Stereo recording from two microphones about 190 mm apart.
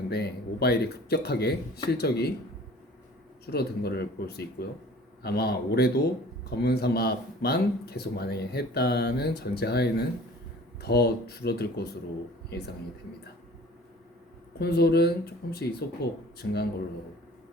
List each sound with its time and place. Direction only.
0.1 s speech: 60° left (ahead or behind)
3.4 s speech: 60° left (ahead or behind)
14.6 s speech: 55° left (ahead or behind)